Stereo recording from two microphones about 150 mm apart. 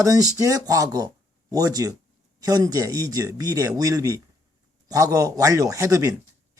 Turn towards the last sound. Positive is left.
turn(degrees=-20)  # may be behind; listen again after turning